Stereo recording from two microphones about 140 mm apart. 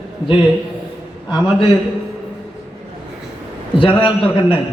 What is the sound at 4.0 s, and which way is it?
Speech, 40° left (ahead or behind).